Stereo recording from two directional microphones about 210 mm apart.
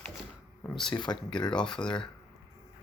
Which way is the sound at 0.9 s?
20° left (ahead or behind).